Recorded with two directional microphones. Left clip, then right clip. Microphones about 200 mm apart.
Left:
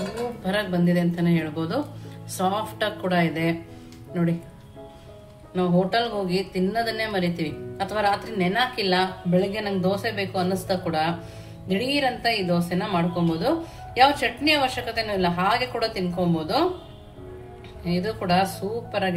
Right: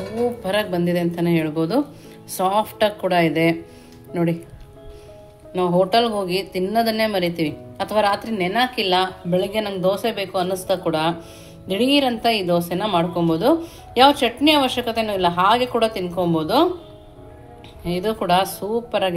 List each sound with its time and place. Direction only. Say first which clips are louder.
0.5 s speech: right 4 dB; 40° right (ahead or behind)
5.5 s speech: right 5 dB; 35° right (ahead or behind)
17.8 s speech: right 5 dB; 40° right (ahead or behind)